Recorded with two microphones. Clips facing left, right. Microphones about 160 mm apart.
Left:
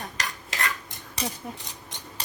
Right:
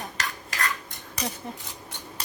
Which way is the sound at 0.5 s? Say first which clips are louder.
Even; 25° left (ahead or behind).